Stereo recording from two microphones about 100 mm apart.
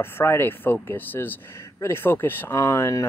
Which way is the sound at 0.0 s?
25° left (ahead or behind).